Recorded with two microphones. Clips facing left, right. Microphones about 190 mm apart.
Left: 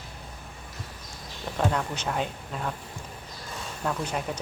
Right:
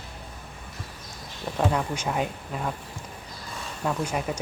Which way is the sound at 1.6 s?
5° right (ahead or behind).